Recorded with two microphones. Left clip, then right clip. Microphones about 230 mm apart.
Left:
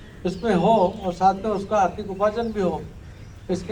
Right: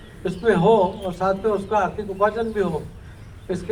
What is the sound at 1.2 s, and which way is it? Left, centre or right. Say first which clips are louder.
Speech: left 1 dB; left.